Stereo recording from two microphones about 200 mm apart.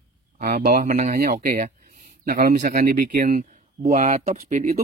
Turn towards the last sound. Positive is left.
turn(degrees=-40)  # may be behind; listen again after turning